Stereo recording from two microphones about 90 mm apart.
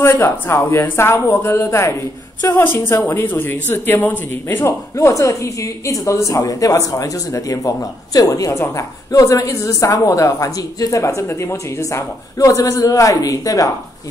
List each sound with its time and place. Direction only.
0.0 s a woman's voice: 30° left (ahead or behind)